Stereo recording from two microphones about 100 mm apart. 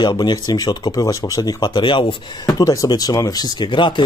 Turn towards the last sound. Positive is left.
turn(degrees=55)  # may be behind; listen again after turning